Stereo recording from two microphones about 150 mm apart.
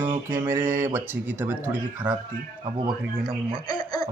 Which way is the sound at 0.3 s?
15° right (ahead or behind).